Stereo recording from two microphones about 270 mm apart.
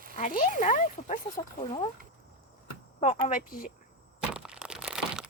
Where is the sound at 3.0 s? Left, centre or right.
Left.